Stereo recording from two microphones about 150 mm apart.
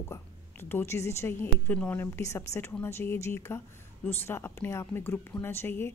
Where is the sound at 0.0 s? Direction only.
15° left (ahead or behind).